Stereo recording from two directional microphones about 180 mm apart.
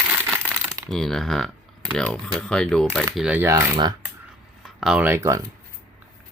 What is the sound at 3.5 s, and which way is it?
Coin, 20° right (ahead or behind).